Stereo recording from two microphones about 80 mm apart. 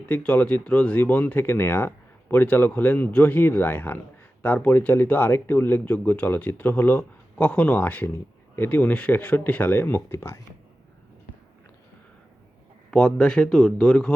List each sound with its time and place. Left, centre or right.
0.1 s speech: centre; by 10.4 s left
12.9 s speech: centre